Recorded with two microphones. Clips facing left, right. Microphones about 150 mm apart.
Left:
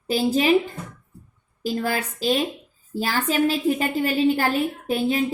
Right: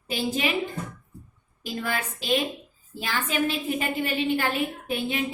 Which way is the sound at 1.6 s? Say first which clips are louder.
Left 5 dB; 35° left (ahead or behind).